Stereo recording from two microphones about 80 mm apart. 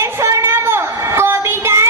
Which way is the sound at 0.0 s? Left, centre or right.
Right.